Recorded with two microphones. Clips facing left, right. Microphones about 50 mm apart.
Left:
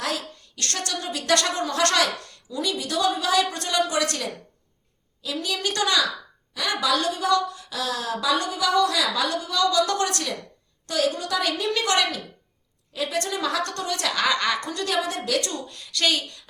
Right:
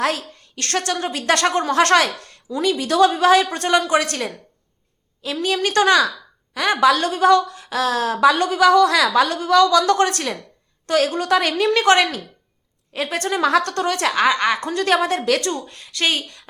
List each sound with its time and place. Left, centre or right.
0.0 s a woman's voice: right
14.2 s a woman's voice: right
14.7 s a woman's voice: right
15.4 s speech: right